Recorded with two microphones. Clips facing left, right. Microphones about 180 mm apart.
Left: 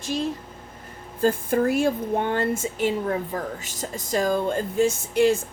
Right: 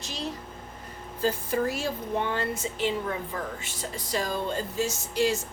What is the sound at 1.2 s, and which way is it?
Speech, 50° left (ahead or behind).